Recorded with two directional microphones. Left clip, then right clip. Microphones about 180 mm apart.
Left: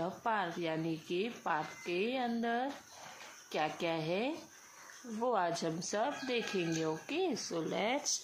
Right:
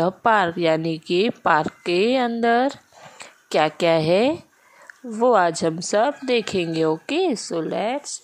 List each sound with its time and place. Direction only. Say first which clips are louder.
0.0 s speech: right 17 dB; 60° right (ahead or behind); by 8.2 s 35° right (ahead or behind)